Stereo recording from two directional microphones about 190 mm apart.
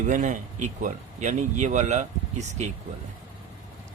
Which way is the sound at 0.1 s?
40° right (ahead or behind).